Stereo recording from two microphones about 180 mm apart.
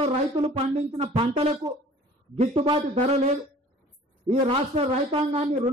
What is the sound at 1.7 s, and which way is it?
Speech, 25° right (ahead or behind).